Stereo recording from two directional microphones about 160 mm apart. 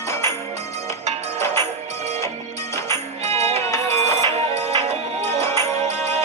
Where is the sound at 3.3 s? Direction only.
40° right (ahead or behind).